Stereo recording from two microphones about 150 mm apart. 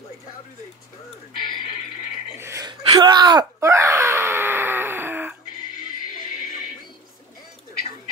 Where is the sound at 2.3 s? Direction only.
20° right (ahead or behind).